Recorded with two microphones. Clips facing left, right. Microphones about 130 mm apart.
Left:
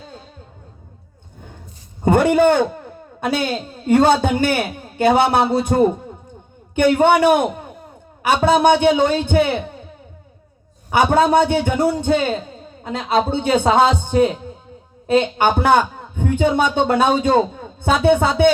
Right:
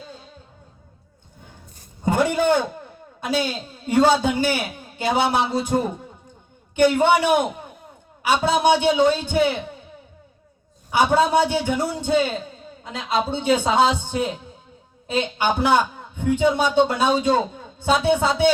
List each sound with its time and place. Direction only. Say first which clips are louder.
2.0 s a man's voice: left 6 dB; 55° left (ahead or behind)
10.9 s a man's voice: left 3 dB; 55° left (ahead or behind)